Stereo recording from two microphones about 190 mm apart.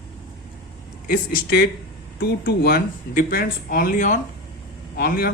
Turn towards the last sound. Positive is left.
turn(degrees=55)  # may be behind; listen again after turning